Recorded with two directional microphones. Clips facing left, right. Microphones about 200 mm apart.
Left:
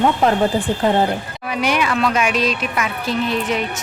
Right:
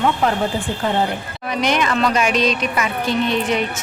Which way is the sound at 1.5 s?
10° left (ahead or behind).